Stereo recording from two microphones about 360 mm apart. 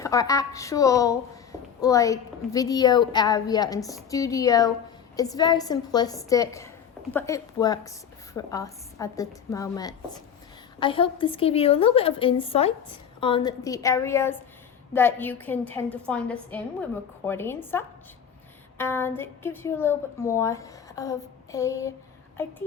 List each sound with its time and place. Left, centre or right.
0.0 s a woman's voice: centre